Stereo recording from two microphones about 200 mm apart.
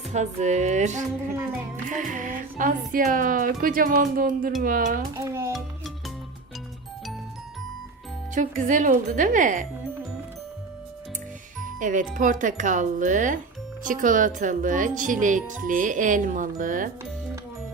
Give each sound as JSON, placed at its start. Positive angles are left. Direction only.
{"t": 0.1, "sound": "speech", "side_deg": -35}
{"t": 5.1, "sound": "a child's voice", "side_deg": -15}
{"t": 8.4, "sound": "speech", "side_deg": -40}
{"t": 11.8, "sound": "speech", "side_deg": -40}